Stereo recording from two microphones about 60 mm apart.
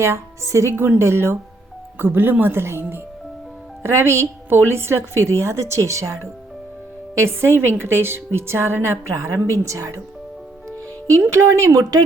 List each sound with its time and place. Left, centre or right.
0.0 s a woman's voice: right
2.0 s a woman's voice: right
7.2 s a woman's voice: right
11.3 s speech: right